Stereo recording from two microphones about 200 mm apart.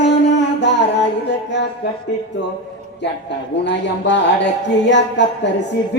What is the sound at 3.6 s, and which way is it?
A woman's voice, 65° left (ahead or behind).